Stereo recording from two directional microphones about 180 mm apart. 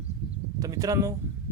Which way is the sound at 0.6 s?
20° right (ahead or behind).